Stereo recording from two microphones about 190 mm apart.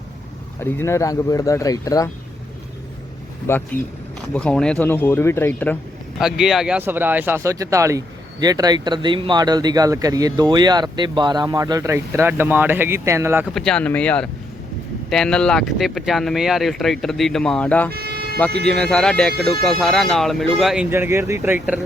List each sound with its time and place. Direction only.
0.6 s speech: 15° left (ahead or behind)
3.5 s speech: 15° left (ahead or behind)
6.1 s speech: centre (ahead or behind)
13.5 s speech: 5° left (ahead or behind)
17.9 s vehicle: 55° right (ahead or behind)
18.6 s speech: 5° left (ahead or behind)
20.9 s speech: 15° right (ahead or behind)